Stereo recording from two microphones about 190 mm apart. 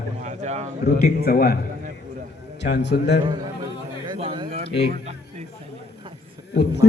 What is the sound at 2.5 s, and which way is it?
Speech, 65° left (ahead or behind).